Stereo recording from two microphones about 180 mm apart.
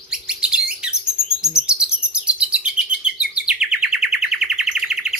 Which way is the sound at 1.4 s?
5° right (ahead or behind).